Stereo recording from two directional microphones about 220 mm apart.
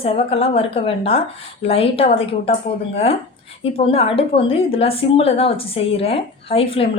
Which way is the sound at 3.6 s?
25° left (ahead or behind).